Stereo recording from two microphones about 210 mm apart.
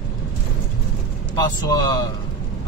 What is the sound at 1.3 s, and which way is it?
Speech, 20° left (ahead or behind).